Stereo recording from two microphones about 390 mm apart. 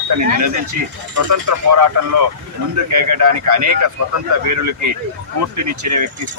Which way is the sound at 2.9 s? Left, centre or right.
Right.